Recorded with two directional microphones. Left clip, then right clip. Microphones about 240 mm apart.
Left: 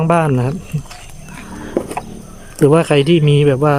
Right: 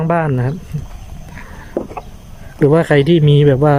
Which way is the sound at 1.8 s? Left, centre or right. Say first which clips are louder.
Left 2 dB; centre.